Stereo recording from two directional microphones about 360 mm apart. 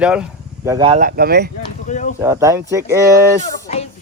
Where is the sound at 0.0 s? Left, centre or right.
Centre; by 1.5 s right.